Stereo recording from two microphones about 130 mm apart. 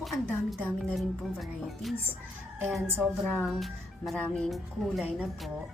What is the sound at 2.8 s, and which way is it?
Speech, 20° right (ahead or behind).